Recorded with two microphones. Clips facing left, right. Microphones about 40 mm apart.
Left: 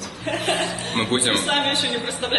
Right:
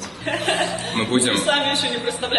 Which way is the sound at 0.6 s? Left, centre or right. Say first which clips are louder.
Right 1 dB; centre.